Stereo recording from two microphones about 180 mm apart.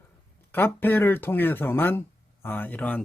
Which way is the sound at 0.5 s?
10° left (ahead or behind).